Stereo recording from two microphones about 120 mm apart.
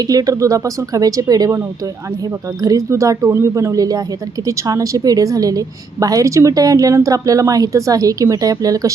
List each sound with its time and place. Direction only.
0.0 s a woman's voice: 30° right (ahead or behind)